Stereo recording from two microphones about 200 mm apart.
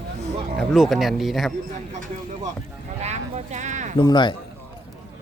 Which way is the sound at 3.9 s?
20° left (ahead or behind).